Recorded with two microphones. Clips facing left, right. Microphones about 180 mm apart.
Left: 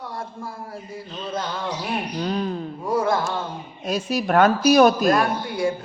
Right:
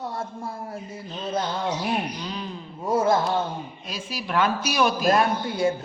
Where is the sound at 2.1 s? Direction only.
50° left (ahead or behind).